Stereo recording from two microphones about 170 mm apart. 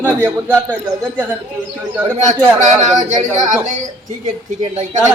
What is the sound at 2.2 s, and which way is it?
Speech, 45° right (ahead or behind).